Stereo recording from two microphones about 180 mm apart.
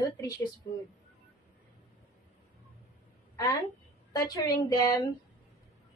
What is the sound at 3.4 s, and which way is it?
A woman's voice, 20° left (ahead or behind).